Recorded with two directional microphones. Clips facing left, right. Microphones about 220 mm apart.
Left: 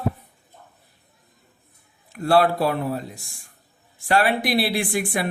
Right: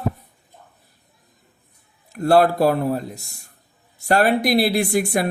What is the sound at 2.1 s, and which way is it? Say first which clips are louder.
A man's voice: right 3 dB; 40° right (ahead or behind).